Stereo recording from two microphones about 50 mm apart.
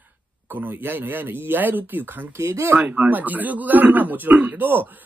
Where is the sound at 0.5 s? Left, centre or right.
Right.